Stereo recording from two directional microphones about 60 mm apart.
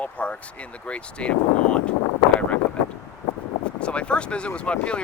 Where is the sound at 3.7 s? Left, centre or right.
Centre.